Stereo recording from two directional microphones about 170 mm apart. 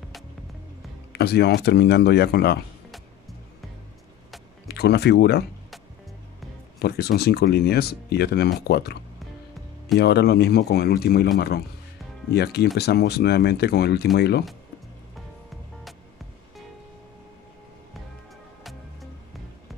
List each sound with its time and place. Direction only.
1.1 s speech: 75° left (ahead or behind)
4.6 s speech: 75° left (ahead or behind)
6.8 s speech: 70° left (ahead or behind)
9.9 s speech: 75° left (ahead or behind)
15.1 s music: centre (ahead or behind)
18.6 s music: centre (ahead or behind)